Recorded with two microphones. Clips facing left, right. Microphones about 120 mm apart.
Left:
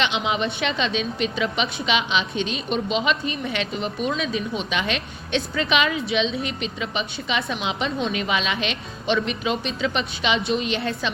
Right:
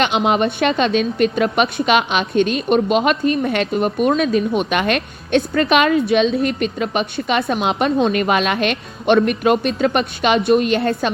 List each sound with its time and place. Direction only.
0.0 s a woman's voice: 50° right (ahead or behind)